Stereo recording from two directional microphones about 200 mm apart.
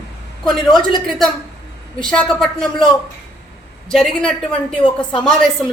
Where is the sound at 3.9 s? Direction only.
Centre (ahead or behind).